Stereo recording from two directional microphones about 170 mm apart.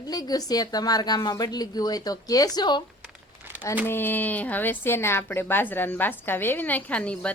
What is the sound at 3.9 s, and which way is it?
A woman's voice, 10° left (ahead or behind).